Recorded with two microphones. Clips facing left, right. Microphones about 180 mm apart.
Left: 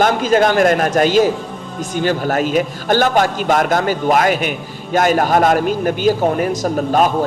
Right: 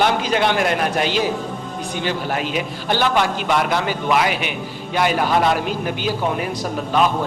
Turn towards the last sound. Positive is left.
turn(degrees=45)  # may be behind; listen again after turning